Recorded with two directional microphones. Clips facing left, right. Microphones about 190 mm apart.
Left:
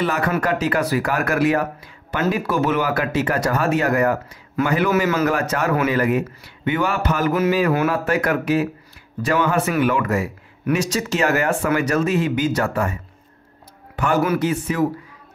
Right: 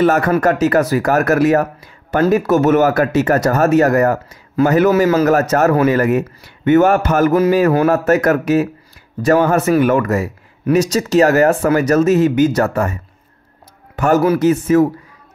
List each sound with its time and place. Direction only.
0.0 s speech: 45° right (ahead or behind)